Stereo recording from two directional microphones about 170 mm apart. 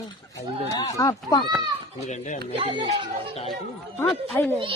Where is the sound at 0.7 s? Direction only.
20° left (ahead or behind).